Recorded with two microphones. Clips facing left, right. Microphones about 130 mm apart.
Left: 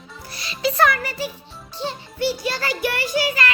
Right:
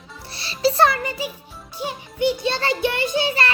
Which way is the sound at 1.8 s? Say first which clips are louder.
Right 2 dB; 15° right (ahead or behind).